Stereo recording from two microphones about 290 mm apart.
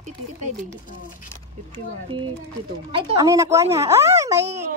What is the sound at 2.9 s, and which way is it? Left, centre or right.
Speech, centre.